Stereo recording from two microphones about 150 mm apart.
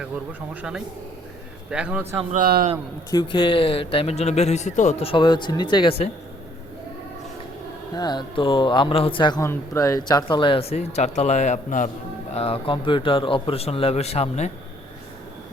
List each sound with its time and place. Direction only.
0.5 s a man's voice: 5° right (ahead or behind)
2.3 s a man's voice: 75° right (ahead or behind)
3.1 s a man's voice: 30° left (ahead or behind)
7.9 s a man's voice: 30° left (ahead or behind); by 11.9 s 55° left (ahead or behind)
12.3 s a man's voice: 40° left (ahead or behind)